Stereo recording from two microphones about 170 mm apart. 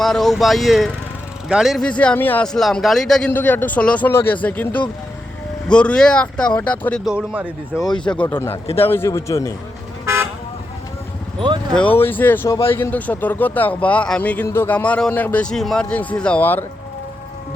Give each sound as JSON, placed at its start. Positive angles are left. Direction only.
{"t": 0.0, "sound": "speech", "side_deg": 0}
{"t": 7.0, "sound": "speech", "side_deg": -5}
{"t": 7.8, "sound": "speech", "side_deg": 25}
{"t": 8.0, "sound": "speech", "side_deg": 5}
{"t": 11.3, "sound": "speech", "side_deg": -25}
{"t": 11.7, "sound": "speech", "side_deg": 10}